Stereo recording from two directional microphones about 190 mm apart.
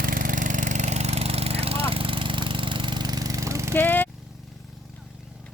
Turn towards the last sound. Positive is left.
turn(degrees=10)  # may be behind; listen again after turning